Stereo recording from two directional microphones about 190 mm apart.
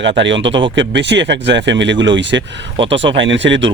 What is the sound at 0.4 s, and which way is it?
Speech, 25° right (ahead or behind).